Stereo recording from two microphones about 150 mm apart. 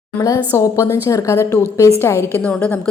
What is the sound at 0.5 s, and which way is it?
A woman's voice, 20° left (ahead or behind).